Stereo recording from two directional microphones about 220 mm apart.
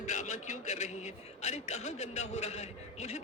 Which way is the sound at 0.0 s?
30° left (ahead or behind).